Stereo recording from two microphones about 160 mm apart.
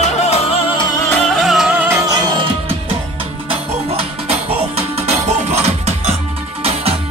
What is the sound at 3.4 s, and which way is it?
Music, 40° right (ahead or behind).